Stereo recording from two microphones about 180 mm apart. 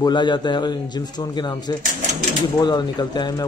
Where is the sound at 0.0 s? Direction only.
25° left (ahead or behind).